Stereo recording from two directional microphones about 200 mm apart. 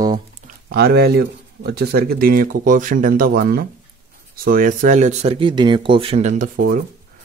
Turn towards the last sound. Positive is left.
turn(degrees=-40)  # may be behind; listen again after turning